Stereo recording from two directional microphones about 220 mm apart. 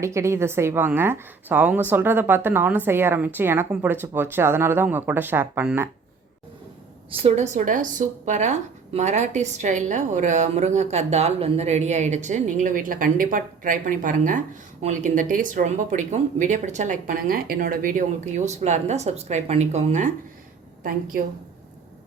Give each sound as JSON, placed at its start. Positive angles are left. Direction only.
{"t": 0.0, "sound": "a woman's voice", "side_deg": -15}
{"t": 7.1, "sound": "speech", "side_deg": -25}